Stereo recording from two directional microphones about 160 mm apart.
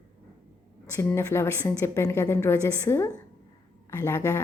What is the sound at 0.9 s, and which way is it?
A woman's voice, 15° left (ahead or behind).